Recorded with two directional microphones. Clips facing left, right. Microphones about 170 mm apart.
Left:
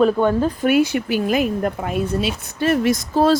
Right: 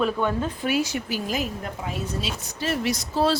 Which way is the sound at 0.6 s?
60° left (ahead or behind).